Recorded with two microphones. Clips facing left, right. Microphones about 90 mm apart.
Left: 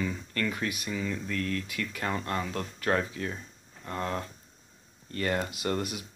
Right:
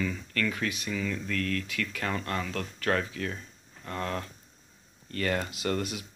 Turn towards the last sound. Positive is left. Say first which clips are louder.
# even
turn(degrees=20)  # may be behind; listen again after turning